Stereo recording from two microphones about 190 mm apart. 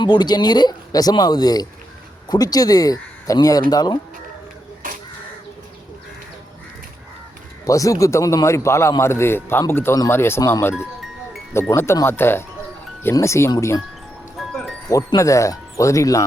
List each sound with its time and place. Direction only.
0.0 s speech: 20° left (ahead or behind)
7.7 s a man's voice: 15° left (ahead or behind)
14.3 s music: centre (ahead or behind)
14.8 s a man's voice: 15° left (ahead or behind)